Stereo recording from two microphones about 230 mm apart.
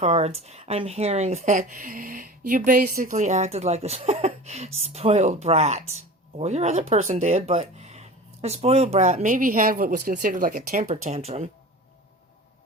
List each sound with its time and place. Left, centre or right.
0.0 s speech: right